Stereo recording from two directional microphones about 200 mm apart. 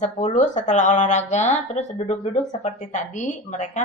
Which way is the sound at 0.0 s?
40° left (ahead or behind).